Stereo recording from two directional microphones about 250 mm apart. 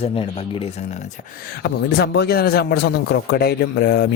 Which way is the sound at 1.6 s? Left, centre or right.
Left.